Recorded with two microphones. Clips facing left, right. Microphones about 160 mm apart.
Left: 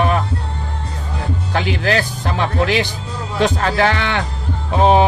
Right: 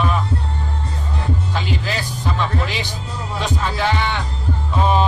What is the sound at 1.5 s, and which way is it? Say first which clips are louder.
Speech: left 6 dB; 70° left (ahead or behind).